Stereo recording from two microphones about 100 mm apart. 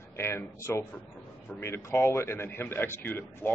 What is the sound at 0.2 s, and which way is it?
A man's voice, 25° left (ahead or behind).